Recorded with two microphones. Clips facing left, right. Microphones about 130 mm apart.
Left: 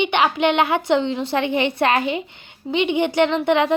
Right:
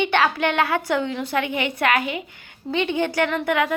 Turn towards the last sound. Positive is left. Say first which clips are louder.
# left 4 dB
turn(degrees=25)  # may be behind; listen again after turning